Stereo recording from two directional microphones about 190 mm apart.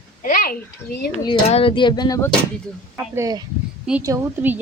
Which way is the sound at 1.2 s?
30° left (ahead or behind).